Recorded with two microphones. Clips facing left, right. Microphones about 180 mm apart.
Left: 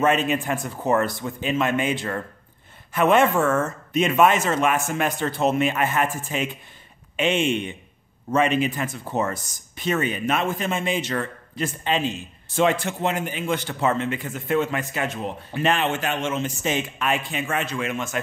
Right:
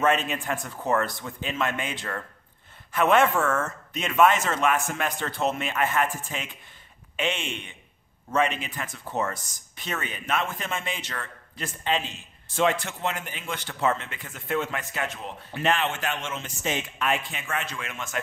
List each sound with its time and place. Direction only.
0.0 s a man's voice: 5° left (ahead or behind)
3.3 s a man's voice: 10° left (ahead or behind)
9.0 s speech: 20° left (ahead or behind)
9.3 s a man's voice: 5° left (ahead or behind)